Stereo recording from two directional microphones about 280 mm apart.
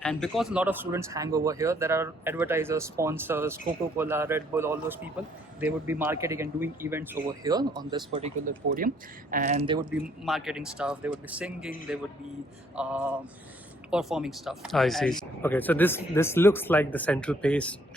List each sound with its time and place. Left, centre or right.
0.0 s speech: centre
10.2 s speech: centre
12.7 s speech: centre